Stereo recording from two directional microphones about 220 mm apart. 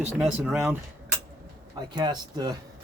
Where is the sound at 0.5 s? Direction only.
10° right (ahead or behind).